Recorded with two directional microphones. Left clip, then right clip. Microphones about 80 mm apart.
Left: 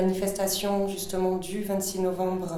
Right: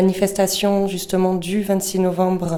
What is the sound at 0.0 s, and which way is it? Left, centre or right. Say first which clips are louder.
Speech: right 9 dB; right.